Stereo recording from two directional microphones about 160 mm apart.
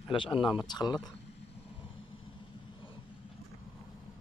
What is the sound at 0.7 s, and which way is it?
Speech, 25° left (ahead or behind).